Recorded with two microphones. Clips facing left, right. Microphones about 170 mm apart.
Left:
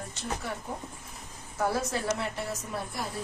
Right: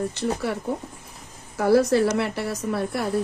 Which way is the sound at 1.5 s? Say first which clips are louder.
Right 11 dB; 70° right (ahead or behind).